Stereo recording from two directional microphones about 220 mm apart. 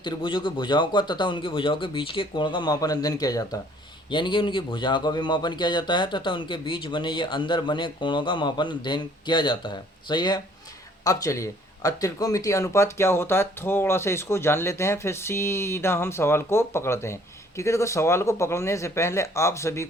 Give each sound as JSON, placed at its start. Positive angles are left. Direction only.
{"t": 0.0, "sound": "speech", "side_deg": 20}